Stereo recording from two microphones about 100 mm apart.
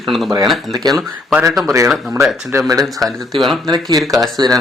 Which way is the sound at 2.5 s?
35° right (ahead or behind).